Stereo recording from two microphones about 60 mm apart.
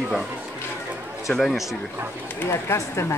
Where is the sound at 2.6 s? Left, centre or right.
Left.